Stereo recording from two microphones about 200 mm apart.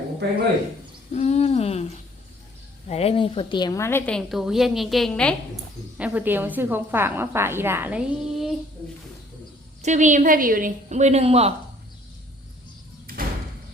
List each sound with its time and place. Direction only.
1.1 s a sound: 30° left (ahead or behind)
2.9 s a woman's voice: 30° left (ahead or behind); by 5.3 s 5° left (ahead or behind)
6.0 s a woman's voice: 10° right (ahead or behind)
9.8 s a woman's voice: 35° right (ahead or behind)
13.1 s door: 45° right (ahead or behind)